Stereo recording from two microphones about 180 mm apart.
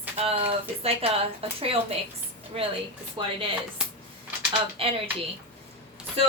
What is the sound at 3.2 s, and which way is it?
Speech, 30° right (ahead or behind).